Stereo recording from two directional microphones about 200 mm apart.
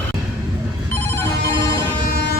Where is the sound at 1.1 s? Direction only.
15° left (ahead or behind).